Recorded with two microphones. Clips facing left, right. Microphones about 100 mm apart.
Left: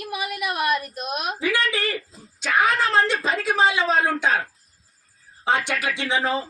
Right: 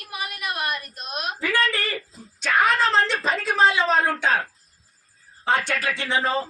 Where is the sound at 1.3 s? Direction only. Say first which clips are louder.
Right 1 dB; 15° left (ahead or behind).